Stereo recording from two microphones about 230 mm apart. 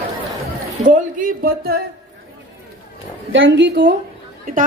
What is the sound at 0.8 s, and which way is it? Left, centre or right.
Speech, right.